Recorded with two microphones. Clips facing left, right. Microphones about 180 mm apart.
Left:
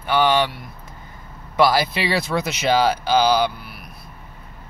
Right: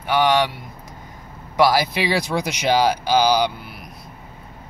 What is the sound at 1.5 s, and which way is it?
Speech, 15° right (ahead or behind).